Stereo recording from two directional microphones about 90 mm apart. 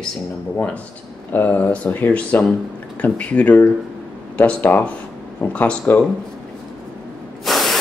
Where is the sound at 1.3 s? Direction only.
20° left (ahead or behind).